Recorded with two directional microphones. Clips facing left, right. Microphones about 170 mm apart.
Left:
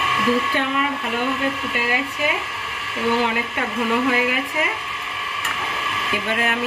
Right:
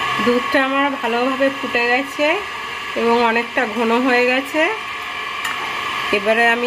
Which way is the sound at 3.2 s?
90° right.